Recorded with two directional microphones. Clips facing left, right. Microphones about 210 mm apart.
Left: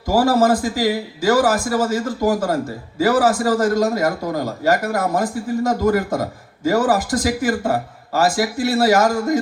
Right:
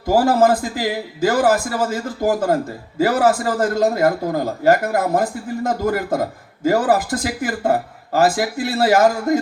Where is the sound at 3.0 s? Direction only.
55° right (ahead or behind).